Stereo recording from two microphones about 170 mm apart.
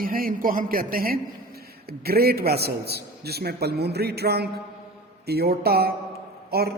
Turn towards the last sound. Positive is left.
turn(degrees=-65)  # may be behind; listen again after turning